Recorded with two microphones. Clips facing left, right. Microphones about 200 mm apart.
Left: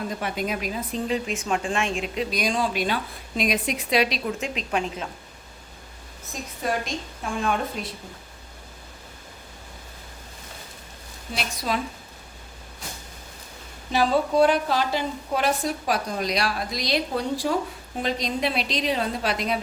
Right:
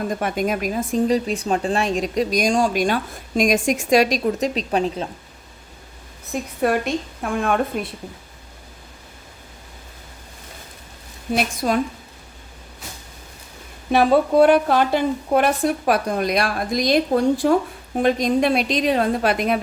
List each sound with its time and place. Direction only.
0.1 s a woman's voice: 50° right (ahead or behind)
6.3 s a woman's voice: 60° right (ahead or behind)
11.3 s a woman's voice: 50° right (ahead or behind)
13.9 s a woman's voice: 60° right (ahead or behind)